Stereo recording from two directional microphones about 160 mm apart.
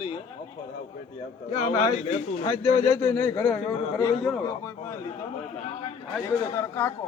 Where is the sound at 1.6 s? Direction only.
45° left (ahead or behind).